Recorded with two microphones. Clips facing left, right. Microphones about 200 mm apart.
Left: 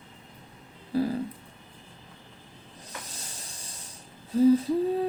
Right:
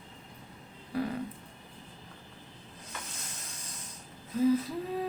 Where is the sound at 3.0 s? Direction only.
35° left (ahead or behind).